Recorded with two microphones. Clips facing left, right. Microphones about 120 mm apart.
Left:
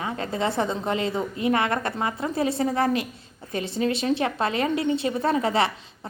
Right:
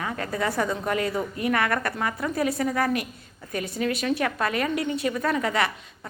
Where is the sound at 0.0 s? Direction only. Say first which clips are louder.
Left 1 dB; 25° left (ahead or behind).